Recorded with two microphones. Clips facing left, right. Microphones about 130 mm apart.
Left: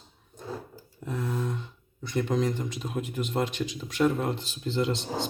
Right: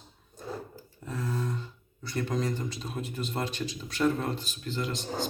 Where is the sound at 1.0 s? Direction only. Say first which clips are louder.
Left 2 dB; 15° left (ahead or behind).